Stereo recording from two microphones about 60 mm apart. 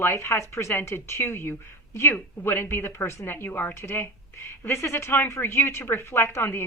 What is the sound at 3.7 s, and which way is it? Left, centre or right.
Speech, left.